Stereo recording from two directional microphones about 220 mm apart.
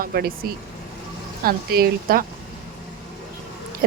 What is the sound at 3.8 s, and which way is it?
Pig, 40° right (ahead or behind).